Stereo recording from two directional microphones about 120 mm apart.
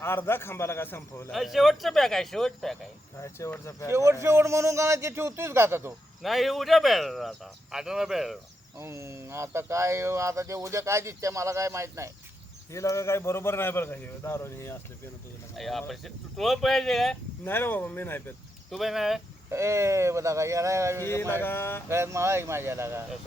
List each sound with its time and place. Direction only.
0.0 s a man's voice: 20° left (ahead or behind)
1.3 s speech: centre (ahead or behind)
3.2 s a man's voice: 25° left (ahead or behind)
3.9 s speech: 25° right (ahead or behind)
6.2 s speech: centre (ahead or behind)
8.8 s speech: 25° right (ahead or behind)
12.7 s a man's voice: 25° left (ahead or behind)
15.5 s speech: centre (ahead or behind)
17.4 s speech: 15° left (ahead or behind)
18.7 s speech: centre (ahead or behind)
19.5 s speech: 25° right (ahead or behind)
21.0 s a man's voice: 20° left (ahead or behind)
21.8 s speech: 20° right (ahead or behind)